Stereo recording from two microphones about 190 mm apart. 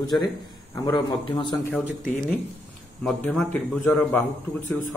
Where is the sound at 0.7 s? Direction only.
25° left (ahead or behind).